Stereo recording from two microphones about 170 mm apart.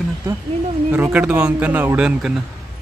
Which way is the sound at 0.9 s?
10° right (ahead or behind).